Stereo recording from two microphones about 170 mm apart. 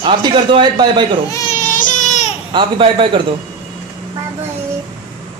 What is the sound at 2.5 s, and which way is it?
Speech, 30° right (ahead or behind).